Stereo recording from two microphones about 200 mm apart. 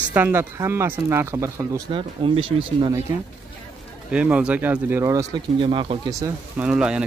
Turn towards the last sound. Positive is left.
turn(degrees=-5)  # may be behind; listen again after turning